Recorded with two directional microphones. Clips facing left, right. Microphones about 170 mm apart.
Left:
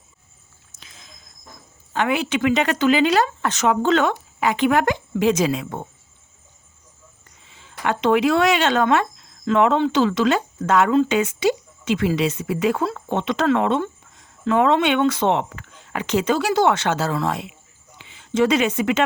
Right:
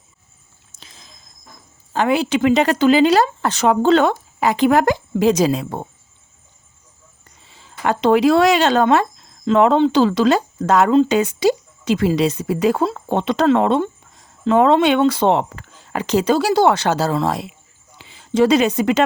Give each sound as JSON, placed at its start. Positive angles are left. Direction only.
{"t": 0.8, "sound": "a sound", "side_deg": -35}
{"t": 1.9, "sound": "speech", "side_deg": -35}
{"t": 7.4, "sound": "speech", "side_deg": -35}